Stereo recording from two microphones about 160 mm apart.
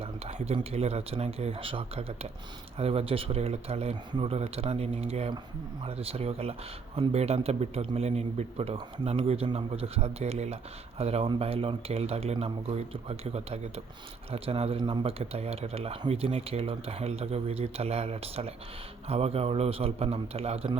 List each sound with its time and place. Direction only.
0.0 s speech: 40° right (ahead or behind)